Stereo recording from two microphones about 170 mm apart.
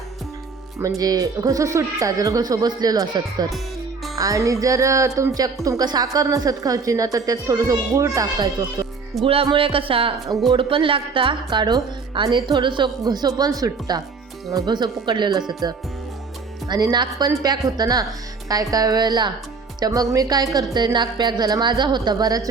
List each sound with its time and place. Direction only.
0.8 s a woman's voice: 20° right (ahead or behind)
4.1 s music: 20° right (ahead or behind)
4.6 s a woman's voice: 20° right (ahead or behind)